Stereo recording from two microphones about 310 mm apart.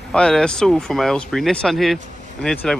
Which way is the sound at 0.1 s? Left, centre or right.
Centre.